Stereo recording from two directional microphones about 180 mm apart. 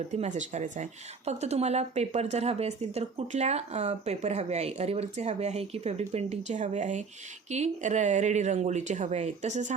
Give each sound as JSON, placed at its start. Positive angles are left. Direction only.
{"t": 0.1, "sound": "speech", "side_deg": -40}